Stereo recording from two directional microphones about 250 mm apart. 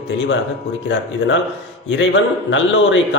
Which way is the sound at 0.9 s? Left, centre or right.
Left.